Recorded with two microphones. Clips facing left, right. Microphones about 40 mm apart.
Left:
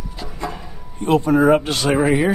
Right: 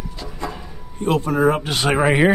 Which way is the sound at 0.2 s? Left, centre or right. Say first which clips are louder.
Left 2 dB; centre.